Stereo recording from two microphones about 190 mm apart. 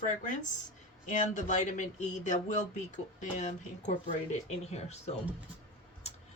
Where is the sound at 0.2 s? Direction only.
40° left (ahead or behind).